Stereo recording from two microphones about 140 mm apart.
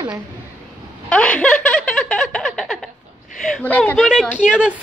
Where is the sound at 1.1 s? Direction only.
10° left (ahead or behind).